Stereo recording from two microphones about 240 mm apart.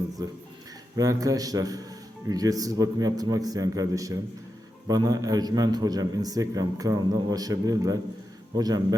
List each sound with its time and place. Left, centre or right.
0.9 s speech: centre